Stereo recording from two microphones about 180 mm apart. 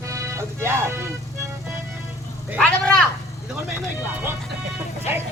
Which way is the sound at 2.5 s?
5° left (ahead or behind).